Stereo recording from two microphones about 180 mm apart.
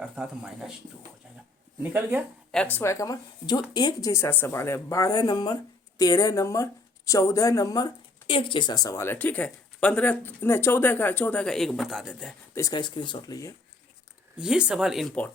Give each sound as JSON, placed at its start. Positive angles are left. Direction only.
{"t": 0.0, "sound": "speech", "side_deg": -5}
{"t": 1.8, "sound": "speech", "side_deg": -10}
{"t": 2.7, "sound": "speech", "side_deg": 15}
{"t": 12.5, "sound": "speech", "side_deg": 20}
{"t": 14.3, "sound": "speech", "side_deg": -5}